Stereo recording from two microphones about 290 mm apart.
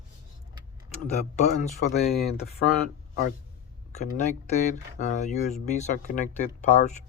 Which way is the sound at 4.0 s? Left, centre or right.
Left.